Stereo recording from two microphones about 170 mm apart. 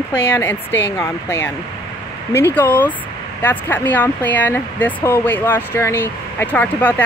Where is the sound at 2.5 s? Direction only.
10° left (ahead or behind).